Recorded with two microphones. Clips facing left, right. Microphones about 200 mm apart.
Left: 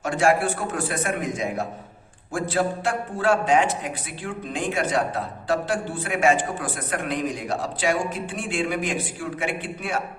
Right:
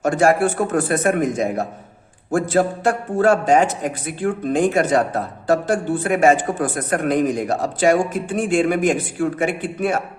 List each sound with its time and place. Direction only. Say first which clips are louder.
0.0 s a man's voice: right 5 dB; 45° right (ahead or behind)